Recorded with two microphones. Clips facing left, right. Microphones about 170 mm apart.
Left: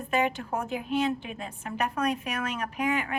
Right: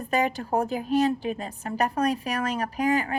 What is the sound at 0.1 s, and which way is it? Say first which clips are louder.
A woman's voice: right 3 dB; 35° right (ahead or behind).